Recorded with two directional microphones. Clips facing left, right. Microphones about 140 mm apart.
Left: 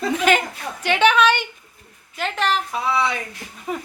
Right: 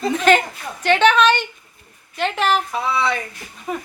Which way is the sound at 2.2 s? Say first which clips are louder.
Right 3 dB; centre (ahead or behind).